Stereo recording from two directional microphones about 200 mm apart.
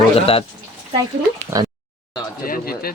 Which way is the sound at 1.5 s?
15° right (ahead or behind).